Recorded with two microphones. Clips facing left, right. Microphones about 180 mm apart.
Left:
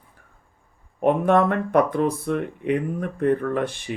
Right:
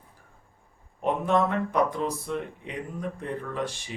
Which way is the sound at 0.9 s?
60° left (ahead or behind).